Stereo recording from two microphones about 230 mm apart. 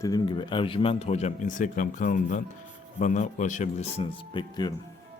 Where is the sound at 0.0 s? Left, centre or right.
Centre.